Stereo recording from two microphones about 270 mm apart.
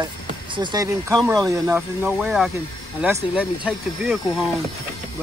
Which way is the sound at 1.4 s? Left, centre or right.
Centre.